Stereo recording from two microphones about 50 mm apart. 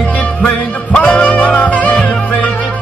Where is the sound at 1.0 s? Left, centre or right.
Left.